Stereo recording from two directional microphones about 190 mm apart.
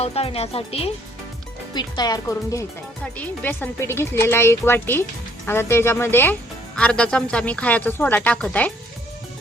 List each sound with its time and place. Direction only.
0.0 s speech: 30° left (ahead or behind); by 8.7 s 10° left (ahead or behind)